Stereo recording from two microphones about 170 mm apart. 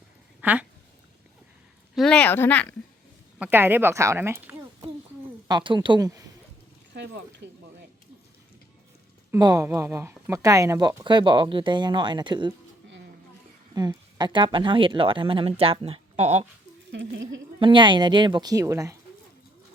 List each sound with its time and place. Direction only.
0.4 s a sound: 10° right (ahead or behind)
2.0 s speech: 5° left (ahead or behind)
3.3 s a woman's voice: 10° right (ahead or behind)
5.5 s speech: 25° right (ahead or behind)
6.9 s speech: 85° right
9.3 s speech: 20° right (ahead or behind)
13.7 s speech: 25° right (ahead or behind); by 16.5 s 40° right (ahead or behind)
16.9 s speech: 90° right
17.6 s speech: 30° right (ahead or behind)